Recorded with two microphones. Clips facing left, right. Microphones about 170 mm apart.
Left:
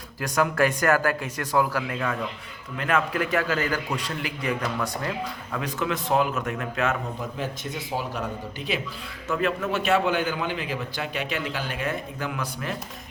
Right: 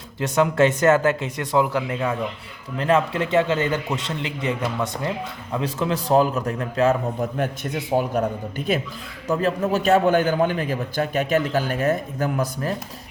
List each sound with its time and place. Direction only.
0.2 s speech: 25° right (ahead or behind)
7.2 s a man's voice: 55° right (ahead or behind)
9.2 s a man's voice: 35° right (ahead or behind)